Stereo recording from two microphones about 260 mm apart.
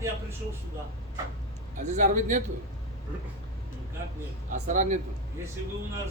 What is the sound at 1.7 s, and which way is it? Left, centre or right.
Speech, right.